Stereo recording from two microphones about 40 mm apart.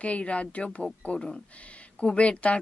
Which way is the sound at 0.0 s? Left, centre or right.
Left.